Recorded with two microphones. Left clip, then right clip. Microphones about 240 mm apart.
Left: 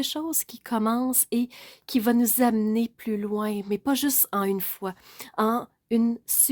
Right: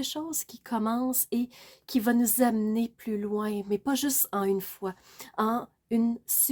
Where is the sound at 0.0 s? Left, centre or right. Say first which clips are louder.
Left 4 dB; left.